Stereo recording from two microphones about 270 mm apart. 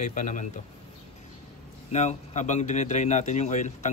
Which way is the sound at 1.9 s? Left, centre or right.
Left.